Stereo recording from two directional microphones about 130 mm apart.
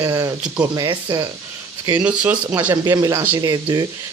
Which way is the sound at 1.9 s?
10° right (ahead or behind).